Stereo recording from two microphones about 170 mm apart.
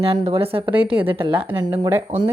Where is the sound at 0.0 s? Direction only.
35° right (ahead or behind).